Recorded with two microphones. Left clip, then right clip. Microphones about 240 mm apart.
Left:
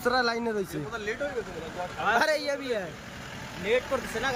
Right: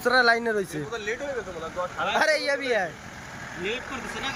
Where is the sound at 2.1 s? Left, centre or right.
Centre.